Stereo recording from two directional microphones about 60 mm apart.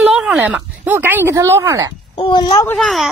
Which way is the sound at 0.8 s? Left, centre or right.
Right.